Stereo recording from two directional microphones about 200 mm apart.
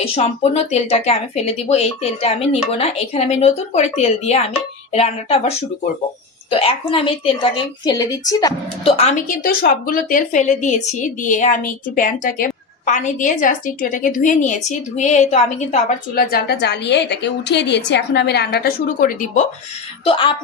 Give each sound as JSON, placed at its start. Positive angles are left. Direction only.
{"t": 0.0, "sound": "a woman's voice", "side_deg": 30}
{"t": 8.9, "sound": "speech", "side_deg": 30}
{"t": 9.4, "sound": "a woman's voice", "side_deg": 45}
{"t": 20.1, "sound": "a woman's voice", "side_deg": 25}